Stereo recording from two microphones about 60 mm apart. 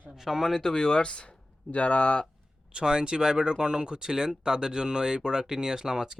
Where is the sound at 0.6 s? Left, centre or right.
Centre.